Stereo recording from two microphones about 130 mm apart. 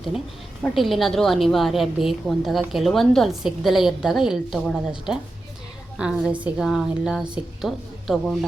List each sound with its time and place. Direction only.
0.6 s a woman's voice: centre (ahead or behind)